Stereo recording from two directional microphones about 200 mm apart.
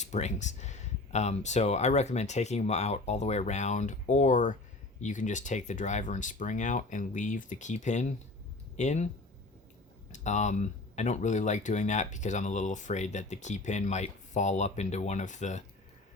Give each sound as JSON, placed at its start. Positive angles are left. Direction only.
{"t": 0.0, "sound": "speech", "side_deg": 35}
{"t": 10.1, "sound": "speech", "side_deg": 35}